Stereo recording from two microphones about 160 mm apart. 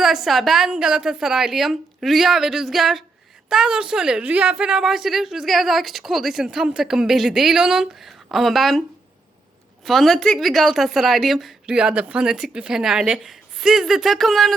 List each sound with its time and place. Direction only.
0.0 s a woman's voice: centre (ahead or behind)
9.8 s a woman's voice: centre (ahead or behind)